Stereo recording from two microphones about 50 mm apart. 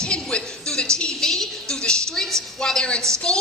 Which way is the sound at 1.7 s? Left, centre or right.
Centre.